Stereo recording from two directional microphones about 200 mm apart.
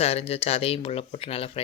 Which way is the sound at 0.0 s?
30° left (ahead or behind).